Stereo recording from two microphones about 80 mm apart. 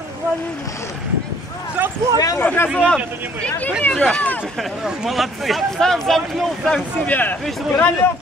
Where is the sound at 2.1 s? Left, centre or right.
Left.